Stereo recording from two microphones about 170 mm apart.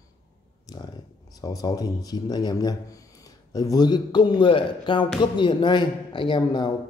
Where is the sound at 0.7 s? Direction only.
25° left (ahead or behind).